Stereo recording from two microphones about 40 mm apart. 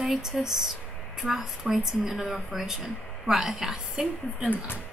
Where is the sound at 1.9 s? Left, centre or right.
Centre.